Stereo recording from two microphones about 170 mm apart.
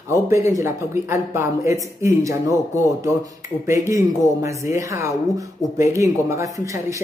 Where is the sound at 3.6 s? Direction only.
15° right (ahead or behind).